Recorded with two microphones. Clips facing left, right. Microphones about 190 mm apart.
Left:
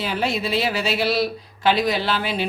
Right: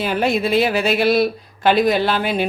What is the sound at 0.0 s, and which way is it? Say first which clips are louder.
Speech: right 5 dB; 55° right (ahead or behind).